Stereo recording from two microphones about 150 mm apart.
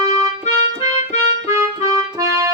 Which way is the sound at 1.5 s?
20° right (ahead or behind).